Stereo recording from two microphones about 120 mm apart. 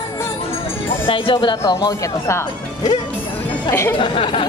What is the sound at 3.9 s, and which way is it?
Speech, 45° left (ahead or behind).